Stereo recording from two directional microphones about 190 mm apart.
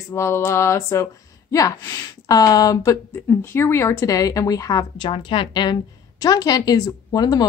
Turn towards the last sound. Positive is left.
turn(degrees=20)  # may be behind; listen again after turning